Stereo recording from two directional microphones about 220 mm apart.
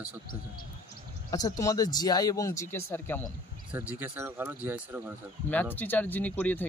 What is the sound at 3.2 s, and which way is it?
Speech, 10° right (ahead or behind).